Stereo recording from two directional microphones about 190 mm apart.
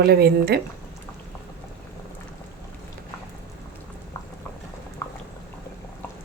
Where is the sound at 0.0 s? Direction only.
55° right (ahead or behind).